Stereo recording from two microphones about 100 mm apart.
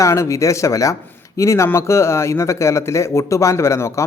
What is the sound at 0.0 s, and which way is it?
A man's voice, 30° left (ahead or behind).